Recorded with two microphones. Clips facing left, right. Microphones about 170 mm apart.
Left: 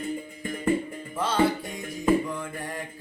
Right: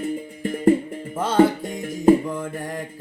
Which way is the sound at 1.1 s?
50° right (ahead or behind).